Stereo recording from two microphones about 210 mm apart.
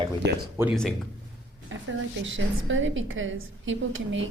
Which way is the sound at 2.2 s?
65° right (ahead or behind).